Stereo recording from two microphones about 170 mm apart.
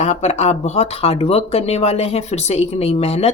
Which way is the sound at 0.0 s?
40° left (ahead or behind).